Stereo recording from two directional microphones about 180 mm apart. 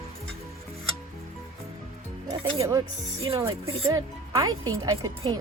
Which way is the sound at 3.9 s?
20° right (ahead or behind).